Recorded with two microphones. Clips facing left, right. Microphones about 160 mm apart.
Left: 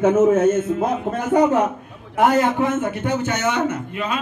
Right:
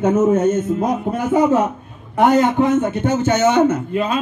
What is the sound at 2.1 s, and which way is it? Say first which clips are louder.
A man's voice: right 3 dB; 30° right (ahead or behind).